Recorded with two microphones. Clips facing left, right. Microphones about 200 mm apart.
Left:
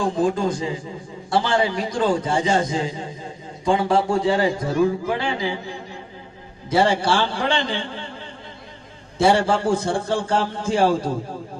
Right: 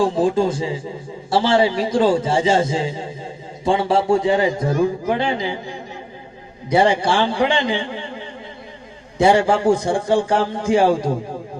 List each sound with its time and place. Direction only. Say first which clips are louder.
0.2 s a man's voice: right 3 dB; 25° right (ahead or behind)
6.7 s a man's voice: right 2 dB; 15° right (ahead or behind)
9.1 s a man's voice: right 3 dB; 15° right (ahead or behind)